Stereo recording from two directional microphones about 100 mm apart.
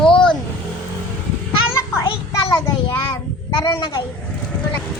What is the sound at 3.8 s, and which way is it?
Speech, 45° left (ahead or behind).